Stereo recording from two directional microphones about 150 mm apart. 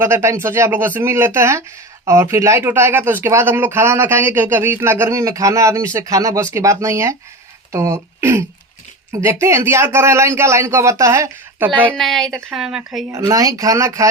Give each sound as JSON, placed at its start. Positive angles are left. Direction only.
{"t": 0.0, "sound": "speech", "side_deg": -20}
{"t": 11.9, "sound": "speech", "side_deg": 5}
{"t": 13.3, "sound": "speech", "side_deg": -20}